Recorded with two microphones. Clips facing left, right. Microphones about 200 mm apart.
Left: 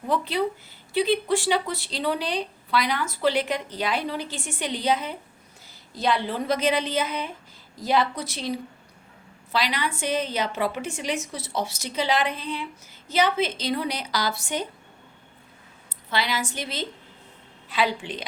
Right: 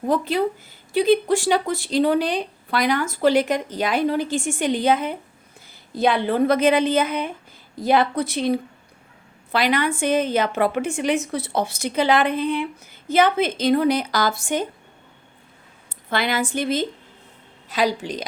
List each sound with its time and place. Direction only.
0.0 s a woman's voice: 45° right (ahead or behind)
16.0 s speech: 55° right (ahead or behind)
17.7 s a woman's voice: 40° right (ahead or behind)